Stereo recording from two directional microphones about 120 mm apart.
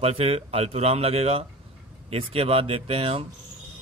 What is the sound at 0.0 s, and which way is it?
Speech, 55° right (ahead or behind).